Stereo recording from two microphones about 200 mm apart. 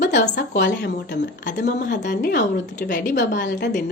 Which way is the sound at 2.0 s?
45° left (ahead or behind).